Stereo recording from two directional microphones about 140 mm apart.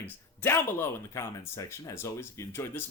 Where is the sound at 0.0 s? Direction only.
15° left (ahead or behind).